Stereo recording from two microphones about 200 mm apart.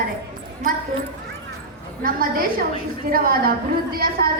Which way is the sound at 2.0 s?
45° right (ahead or behind).